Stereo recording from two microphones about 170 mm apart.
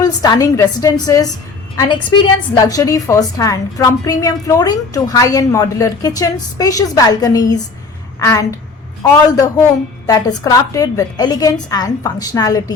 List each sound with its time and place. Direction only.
0.0 s a woman's voice: 20° left (ahead or behind)